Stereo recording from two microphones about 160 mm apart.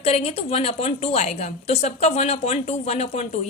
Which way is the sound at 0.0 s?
40° left (ahead or behind).